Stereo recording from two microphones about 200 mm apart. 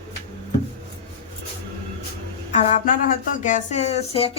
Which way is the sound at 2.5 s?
40° left (ahead or behind).